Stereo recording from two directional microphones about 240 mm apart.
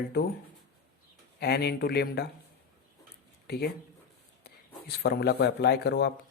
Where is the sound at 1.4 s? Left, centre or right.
Left.